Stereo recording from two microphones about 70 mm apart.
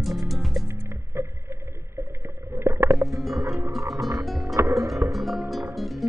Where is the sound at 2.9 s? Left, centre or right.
Centre.